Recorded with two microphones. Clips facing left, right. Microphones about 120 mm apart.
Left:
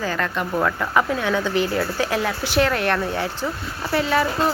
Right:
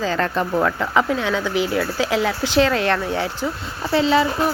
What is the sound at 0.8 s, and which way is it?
Speech, 20° right (ahead or behind).